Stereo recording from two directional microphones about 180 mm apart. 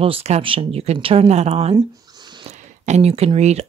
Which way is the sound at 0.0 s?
30° right (ahead or behind).